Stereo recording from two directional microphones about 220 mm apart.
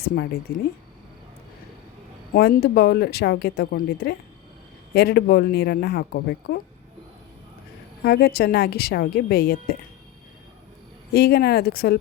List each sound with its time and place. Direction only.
0.5 s speech: 40° left (ahead or behind)
2.3 s speech: 45° left (ahead or behind)
8.0 s speech: 45° left (ahead or behind)
11.1 s speech: 45° left (ahead or behind)